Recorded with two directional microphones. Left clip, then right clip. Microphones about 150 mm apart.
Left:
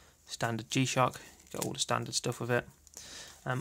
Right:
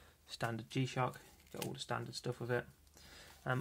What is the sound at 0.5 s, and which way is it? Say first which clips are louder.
Speech: left 12 dB; 45° left (ahead or behind).